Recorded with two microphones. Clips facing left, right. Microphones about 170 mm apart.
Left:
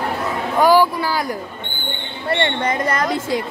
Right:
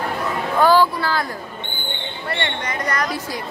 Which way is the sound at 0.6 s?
15° left (ahead or behind).